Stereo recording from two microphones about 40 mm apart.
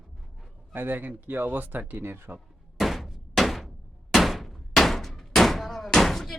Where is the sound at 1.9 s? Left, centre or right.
Right.